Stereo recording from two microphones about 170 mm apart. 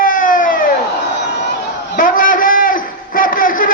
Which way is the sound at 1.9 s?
55° left (ahead or behind).